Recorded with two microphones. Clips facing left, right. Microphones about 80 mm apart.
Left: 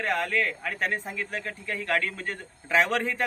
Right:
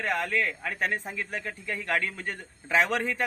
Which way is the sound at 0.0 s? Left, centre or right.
Centre.